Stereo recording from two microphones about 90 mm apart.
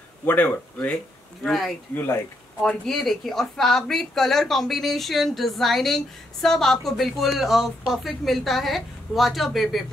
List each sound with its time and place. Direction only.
0.2 s speech: 20° left (ahead or behind)
1.4 s speech: centre (ahead or behind)